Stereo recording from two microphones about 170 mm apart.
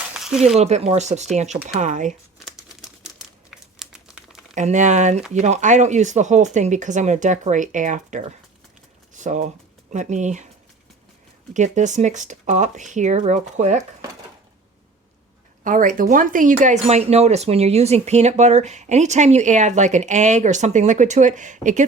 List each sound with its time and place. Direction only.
0.1 s a sound: 5° right (ahead or behind)
0.5 s speech: 40° right (ahead or behind)
3.2 s crumpling: centre (ahead or behind)
4.5 s speech: 45° right (ahead or behind)
11.5 s speech: 45° right (ahead or behind)
15.6 s speech: 50° right (ahead or behind)